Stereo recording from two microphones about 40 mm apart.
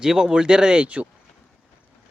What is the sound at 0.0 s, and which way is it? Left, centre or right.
Speech, centre.